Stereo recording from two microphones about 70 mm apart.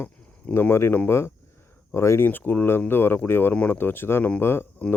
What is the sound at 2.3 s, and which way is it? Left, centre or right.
Speech, left.